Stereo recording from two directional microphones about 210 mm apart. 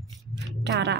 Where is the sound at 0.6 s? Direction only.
55° right (ahead or behind).